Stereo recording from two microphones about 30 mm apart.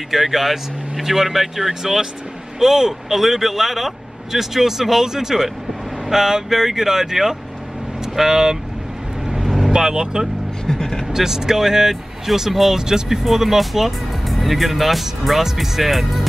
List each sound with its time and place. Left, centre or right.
0.1 s a man's voice: centre
9.3 s vehicle: centre
9.7 s speech: right
10.7 s vehicle: centre
11.1 s a man's voice: centre
12.8 s speech: centre
13.2 s speech: centre